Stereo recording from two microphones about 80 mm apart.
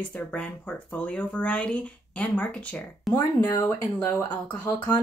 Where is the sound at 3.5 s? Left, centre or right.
Left.